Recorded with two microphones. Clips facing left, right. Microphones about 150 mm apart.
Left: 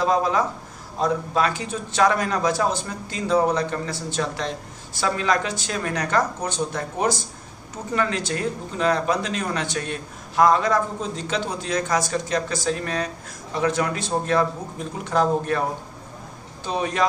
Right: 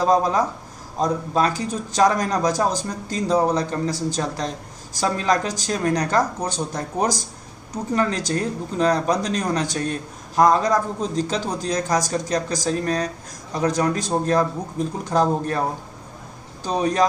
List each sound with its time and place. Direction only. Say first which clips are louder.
0.0 s speech: right 2 dB; 40° right (ahead or behind)
16.6 s speech: right 4 dB; 35° right (ahead or behind)